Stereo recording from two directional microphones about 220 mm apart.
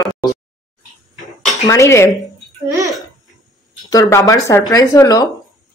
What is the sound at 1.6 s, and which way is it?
Speech, 15° left (ahead or behind).